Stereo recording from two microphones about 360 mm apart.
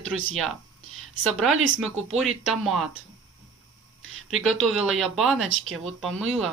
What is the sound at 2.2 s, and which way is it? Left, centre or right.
Speech, centre.